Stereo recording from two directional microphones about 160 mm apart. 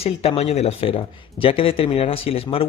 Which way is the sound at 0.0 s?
40° left (ahead or behind).